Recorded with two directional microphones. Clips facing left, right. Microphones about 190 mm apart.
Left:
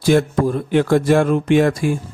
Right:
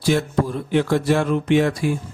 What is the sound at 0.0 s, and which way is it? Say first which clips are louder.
Speech: left 5 dB; 50° left (ahead or behind).